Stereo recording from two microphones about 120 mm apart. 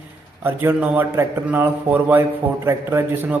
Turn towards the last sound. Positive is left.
turn(degrees=-20)  # may be behind; listen again after turning